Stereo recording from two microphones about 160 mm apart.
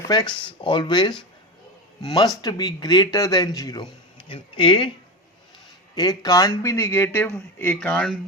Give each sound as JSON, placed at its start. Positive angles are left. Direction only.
{"t": 0.1, "sound": "speech", "side_deg": 25}
{"t": 5.9, "sound": "speech", "side_deg": 25}